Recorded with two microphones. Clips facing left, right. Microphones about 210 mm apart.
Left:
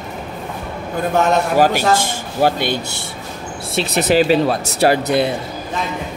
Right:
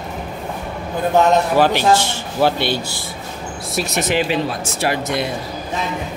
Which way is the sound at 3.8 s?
35° left (ahead or behind).